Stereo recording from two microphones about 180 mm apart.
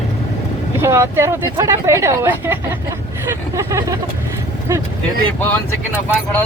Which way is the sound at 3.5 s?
15° right (ahead or behind).